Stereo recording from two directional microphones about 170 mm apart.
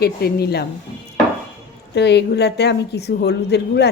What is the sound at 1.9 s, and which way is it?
A woman's voice, 80° left.